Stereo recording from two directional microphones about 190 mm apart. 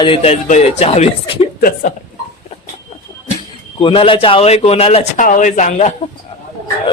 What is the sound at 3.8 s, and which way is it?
A man's voice, 25° left (ahead or behind).